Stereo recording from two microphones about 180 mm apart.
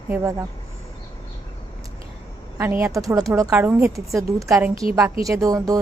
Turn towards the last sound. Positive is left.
turn(degrees=-20)  # may be behind; listen again after turning